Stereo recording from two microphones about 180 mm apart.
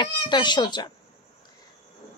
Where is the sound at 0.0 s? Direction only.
25° left (ahead or behind).